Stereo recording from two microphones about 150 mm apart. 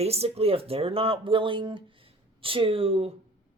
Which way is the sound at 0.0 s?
45° right (ahead or behind).